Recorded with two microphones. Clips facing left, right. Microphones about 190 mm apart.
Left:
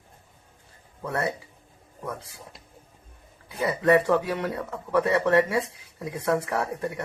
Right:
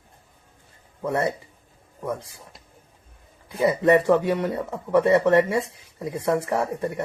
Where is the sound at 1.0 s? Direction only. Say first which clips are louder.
Right 4 dB; 15° right (ahead or behind).